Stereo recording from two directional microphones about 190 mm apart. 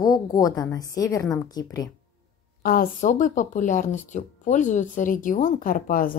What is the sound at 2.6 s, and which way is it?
A woman's voice, 50° left (ahead or behind).